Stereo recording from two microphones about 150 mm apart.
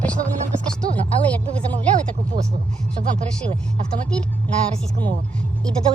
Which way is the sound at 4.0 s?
10° left (ahead or behind).